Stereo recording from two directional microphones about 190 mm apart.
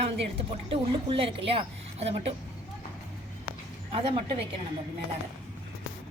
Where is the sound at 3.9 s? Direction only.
30° right (ahead or behind).